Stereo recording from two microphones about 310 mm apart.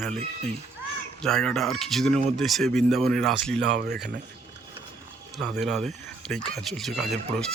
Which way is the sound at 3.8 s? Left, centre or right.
Right.